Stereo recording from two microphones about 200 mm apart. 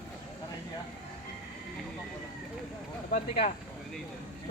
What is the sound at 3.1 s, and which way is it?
Speech, 40° left (ahead or behind).